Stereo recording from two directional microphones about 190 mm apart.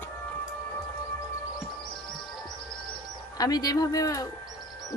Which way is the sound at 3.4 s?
20° left (ahead or behind).